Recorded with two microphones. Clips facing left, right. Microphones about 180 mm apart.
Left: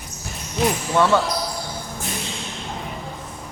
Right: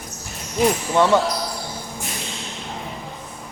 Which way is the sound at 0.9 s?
15° right (ahead or behind).